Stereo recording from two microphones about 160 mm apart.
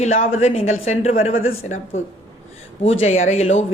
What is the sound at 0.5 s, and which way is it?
Speech, 45° left (ahead or behind).